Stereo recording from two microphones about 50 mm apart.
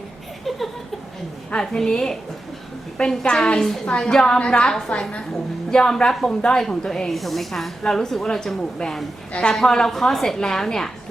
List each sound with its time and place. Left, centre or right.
1.6 s a woman's voice: centre; by 5.1 s left
5.7 s a woman's voice: centre
9.3 s a woman's voice: centre